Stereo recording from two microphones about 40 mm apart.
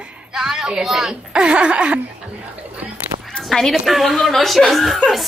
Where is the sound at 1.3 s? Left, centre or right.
Right.